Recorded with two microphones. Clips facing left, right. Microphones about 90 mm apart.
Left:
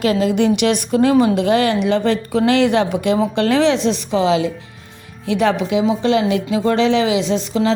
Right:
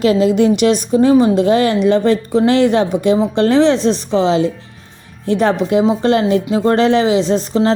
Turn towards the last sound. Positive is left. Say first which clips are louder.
# right 3 dB
turn(degrees=-40)  # may be behind; listen again after turning